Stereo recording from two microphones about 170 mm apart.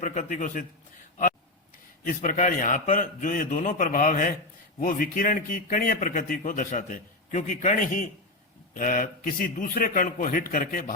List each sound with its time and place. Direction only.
0.0 s speech: 45° left (ahead or behind)
2.0 s a man's voice: 50° left (ahead or behind)